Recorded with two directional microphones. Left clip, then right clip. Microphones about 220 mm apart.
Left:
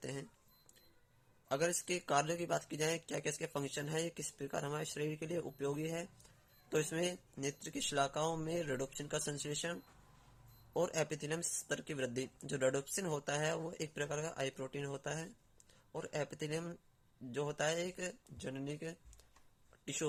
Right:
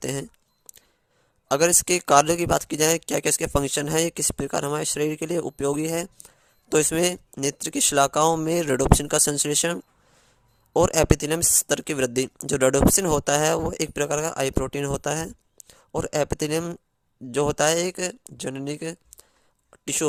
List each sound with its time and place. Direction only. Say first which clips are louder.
0.0 s speech: right 16 dB; 50° right (ahead or behind)
1.5 s speech: right 16 dB; 50° right (ahead or behind)
19.7 s a sound: right 15 dB; 50° right (ahead or behind)